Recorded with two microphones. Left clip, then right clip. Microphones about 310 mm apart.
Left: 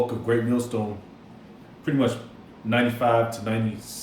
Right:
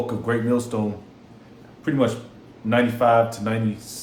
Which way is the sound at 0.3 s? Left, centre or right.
Right.